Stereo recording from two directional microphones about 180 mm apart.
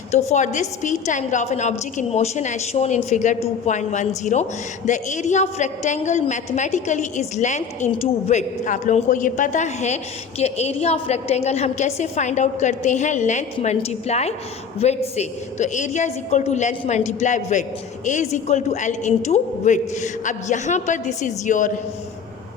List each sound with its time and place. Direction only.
0.1 s a woman's voice: 40° left (ahead or behind)